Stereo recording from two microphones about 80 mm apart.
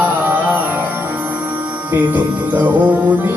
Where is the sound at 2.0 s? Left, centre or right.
Right.